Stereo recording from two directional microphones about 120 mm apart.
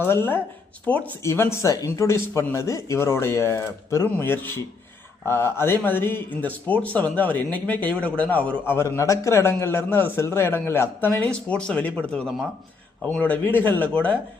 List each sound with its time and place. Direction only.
0.0 s speech: 20° left (ahead or behind)